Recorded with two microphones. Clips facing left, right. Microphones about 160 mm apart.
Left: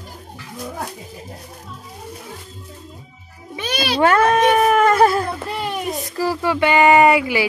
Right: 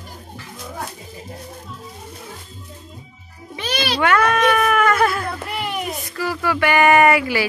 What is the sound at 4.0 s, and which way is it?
Speech, 35° left (ahead or behind).